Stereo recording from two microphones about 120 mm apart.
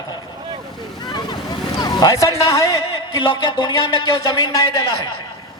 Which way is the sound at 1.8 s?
35° left (ahead or behind).